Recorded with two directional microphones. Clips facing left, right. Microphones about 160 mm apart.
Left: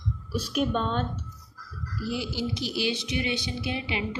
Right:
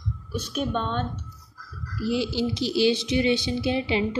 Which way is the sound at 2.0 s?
25° right (ahead or behind).